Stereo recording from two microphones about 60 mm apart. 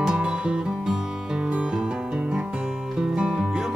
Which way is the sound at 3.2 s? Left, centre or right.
Centre.